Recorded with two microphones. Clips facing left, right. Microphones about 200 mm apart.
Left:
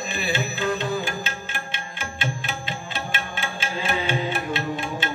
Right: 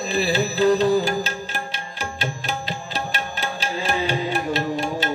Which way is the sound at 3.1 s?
40° right (ahead or behind).